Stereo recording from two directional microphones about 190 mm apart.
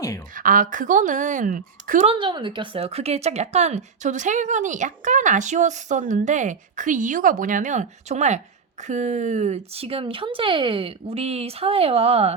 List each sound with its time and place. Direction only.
0.3 s a woman's voice: 45° right (ahead or behind)
2.0 s speech: 25° right (ahead or behind)